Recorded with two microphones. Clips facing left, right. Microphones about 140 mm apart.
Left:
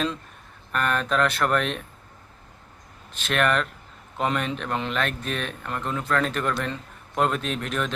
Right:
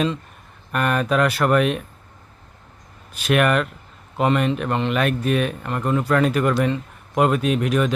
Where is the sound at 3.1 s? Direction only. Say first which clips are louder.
Right 5 dB; 10° right (ahead or behind).